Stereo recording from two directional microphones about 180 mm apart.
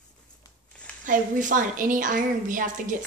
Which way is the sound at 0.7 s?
5° left (ahead or behind).